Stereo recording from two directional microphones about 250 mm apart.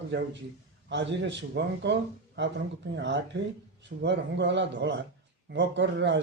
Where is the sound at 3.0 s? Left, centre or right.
Right.